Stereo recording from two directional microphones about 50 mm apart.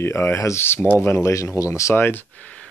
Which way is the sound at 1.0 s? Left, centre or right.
Left.